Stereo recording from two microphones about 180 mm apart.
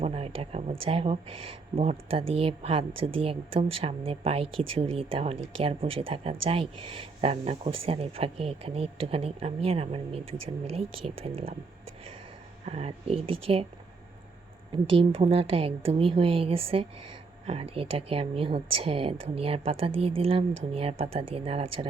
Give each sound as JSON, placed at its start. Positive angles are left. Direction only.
{"t": 0.0, "sound": "speech", "side_deg": -35}
{"t": 12.6, "sound": "speech", "side_deg": -35}
{"t": 14.7, "sound": "speech", "side_deg": -30}